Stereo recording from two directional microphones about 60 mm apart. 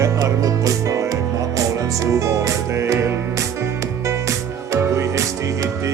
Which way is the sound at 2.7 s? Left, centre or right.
Right.